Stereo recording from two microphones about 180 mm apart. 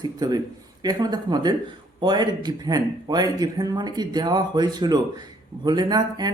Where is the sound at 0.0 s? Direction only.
20° right (ahead or behind).